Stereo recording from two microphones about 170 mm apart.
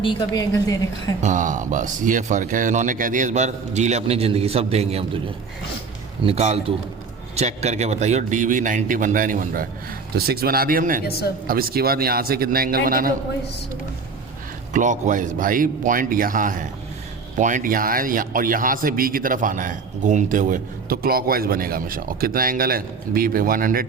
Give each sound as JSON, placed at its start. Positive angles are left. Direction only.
{"t": 0.0, "sound": "a woman's voice", "side_deg": 25}
{"t": 1.2, "sound": "speech", "side_deg": -50}
{"t": 6.2, "sound": "a man's voice", "side_deg": -40}
{"t": 10.2, "sound": "speech", "side_deg": -65}
{"t": 11.0, "sound": "speech", "side_deg": 70}
{"t": 11.4, "sound": "speech", "side_deg": -60}
{"t": 14.7, "sound": "speech", "side_deg": -45}